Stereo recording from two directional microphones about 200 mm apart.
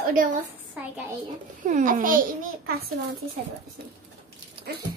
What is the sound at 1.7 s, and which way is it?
Babbling, 40° right (ahead or behind).